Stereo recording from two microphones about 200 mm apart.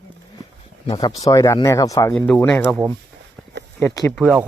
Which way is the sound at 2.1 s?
5° left (ahead or behind).